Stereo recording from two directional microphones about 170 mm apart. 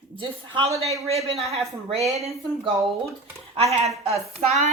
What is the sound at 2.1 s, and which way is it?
Speech, 40° right (ahead or behind).